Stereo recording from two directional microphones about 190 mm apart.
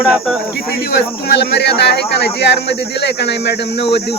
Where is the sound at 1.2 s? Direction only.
65° left (ahead or behind).